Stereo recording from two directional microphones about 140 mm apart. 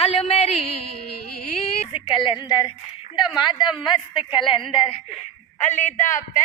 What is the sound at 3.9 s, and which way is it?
Speech, 40° left (ahead or behind).